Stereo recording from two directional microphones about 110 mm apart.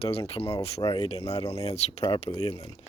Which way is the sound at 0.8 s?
35° left (ahead or behind).